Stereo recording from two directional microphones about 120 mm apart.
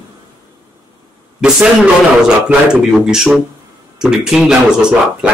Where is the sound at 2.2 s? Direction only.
5° right (ahead or behind).